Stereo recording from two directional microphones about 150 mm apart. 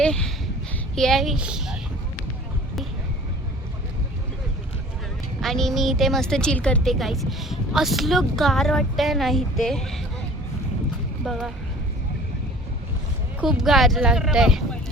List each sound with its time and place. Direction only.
0.0 s speech: 5° left (ahead or behind)
5.4 s a woman's voice: centre (ahead or behind)
11.3 s a woman's voice: centre (ahead or behind)
13.4 s a woman's voice: 5° right (ahead or behind)